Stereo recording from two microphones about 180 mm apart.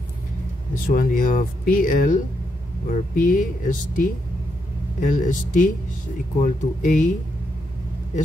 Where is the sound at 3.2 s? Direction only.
50° left (ahead or behind).